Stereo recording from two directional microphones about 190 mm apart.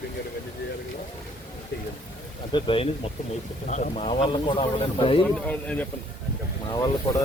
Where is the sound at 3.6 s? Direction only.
40° left (ahead or behind).